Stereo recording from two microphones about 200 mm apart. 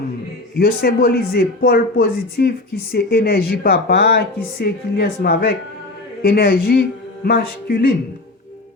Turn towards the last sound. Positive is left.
turn(degrees=50)  # may be behind; listen again after turning